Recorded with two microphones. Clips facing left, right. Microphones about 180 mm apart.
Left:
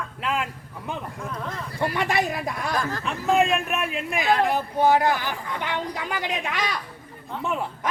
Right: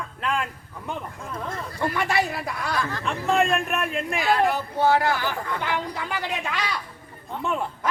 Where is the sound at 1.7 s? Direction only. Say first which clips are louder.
Even; 20° left (ahead or behind).